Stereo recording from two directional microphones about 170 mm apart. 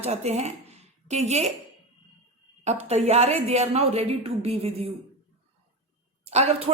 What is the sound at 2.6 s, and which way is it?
A woman's voice, 40° right (ahead or behind).